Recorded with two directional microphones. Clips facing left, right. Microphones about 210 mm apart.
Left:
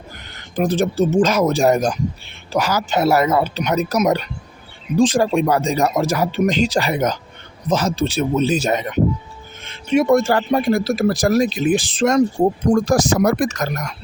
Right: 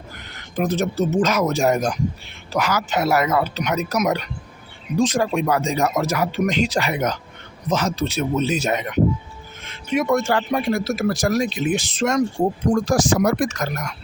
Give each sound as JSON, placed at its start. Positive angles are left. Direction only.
{"t": 0.5, "sound": "speech", "side_deg": 30}